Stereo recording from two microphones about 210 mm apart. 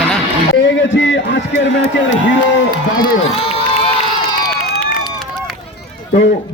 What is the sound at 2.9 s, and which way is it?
Crowd, 25° left (ahead or behind).